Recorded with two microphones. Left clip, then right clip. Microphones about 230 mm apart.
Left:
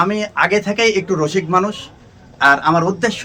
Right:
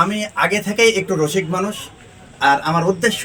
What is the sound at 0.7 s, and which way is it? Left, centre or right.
Speech, centre.